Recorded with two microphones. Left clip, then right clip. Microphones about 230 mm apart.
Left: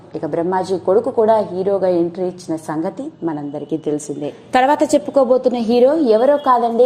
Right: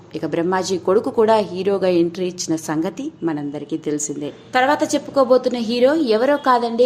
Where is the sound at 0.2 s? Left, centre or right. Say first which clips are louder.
Left 2 dB; centre.